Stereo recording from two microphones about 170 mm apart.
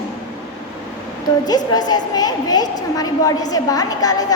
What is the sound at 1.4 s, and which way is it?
A woman's voice, 25° left (ahead or behind).